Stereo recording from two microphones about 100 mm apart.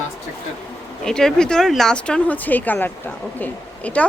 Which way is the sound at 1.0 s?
5° left (ahead or behind).